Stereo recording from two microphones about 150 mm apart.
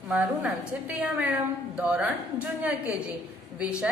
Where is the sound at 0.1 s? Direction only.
10° right (ahead or behind).